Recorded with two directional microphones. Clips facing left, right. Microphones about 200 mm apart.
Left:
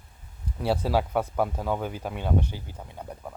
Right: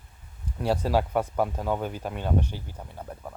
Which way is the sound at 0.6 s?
10° left (ahead or behind).